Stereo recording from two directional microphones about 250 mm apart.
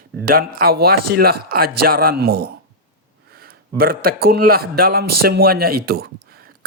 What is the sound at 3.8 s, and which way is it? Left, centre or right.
Speech, right.